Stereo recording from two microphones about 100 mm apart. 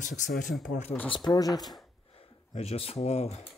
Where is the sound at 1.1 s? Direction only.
45° left (ahead or behind).